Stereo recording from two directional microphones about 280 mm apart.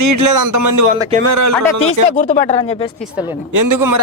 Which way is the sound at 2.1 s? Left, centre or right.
Left.